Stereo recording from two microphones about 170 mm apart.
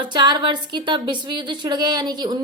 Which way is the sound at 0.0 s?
25° right (ahead or behind).